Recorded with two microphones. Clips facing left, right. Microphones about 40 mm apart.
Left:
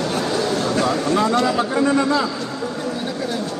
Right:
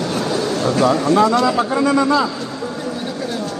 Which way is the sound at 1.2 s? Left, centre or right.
Right.